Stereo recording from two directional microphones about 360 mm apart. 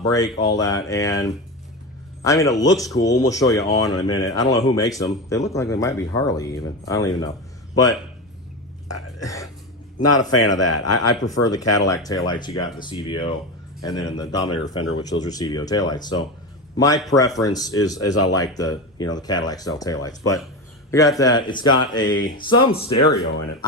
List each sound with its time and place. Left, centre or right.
0.0 s speech: centre
8.9 s speech: left
9.2 s speech: centre
10.0 s a man's voice: left
11.9 s a man's voice: centre
18.0 s speech: left
18.3 s speech: centre
22.7 s speech: left